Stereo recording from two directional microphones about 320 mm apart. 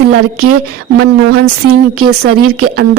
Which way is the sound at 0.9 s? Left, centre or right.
Right.